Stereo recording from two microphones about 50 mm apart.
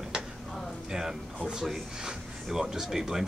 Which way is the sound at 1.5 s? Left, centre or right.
Centre.